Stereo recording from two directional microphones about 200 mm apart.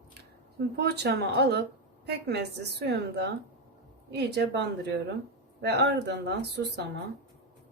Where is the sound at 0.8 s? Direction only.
55° right (ahead or behind).